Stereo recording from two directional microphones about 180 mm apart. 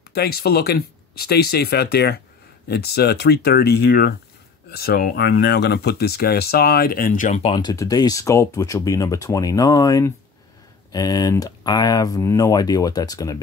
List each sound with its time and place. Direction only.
0.1 s speech: 60° left (ahead or behind); by 13.4 s 20° left (ahead or behind)